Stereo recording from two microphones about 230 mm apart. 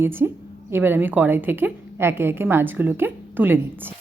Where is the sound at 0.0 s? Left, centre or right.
Centre.